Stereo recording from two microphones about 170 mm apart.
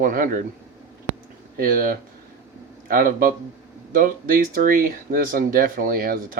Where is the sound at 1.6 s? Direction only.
55° right (ahead or behind).